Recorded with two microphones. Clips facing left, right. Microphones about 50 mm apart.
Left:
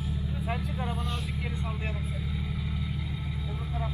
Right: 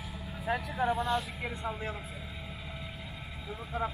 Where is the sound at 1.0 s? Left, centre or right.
Right.